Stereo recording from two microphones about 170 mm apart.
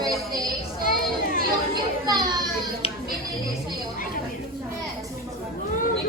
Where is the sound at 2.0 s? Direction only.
25° right (ahead or behind).